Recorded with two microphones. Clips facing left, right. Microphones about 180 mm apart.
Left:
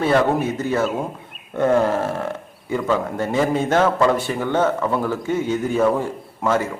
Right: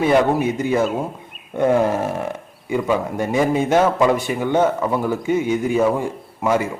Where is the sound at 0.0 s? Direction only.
15° right (ahead or behind).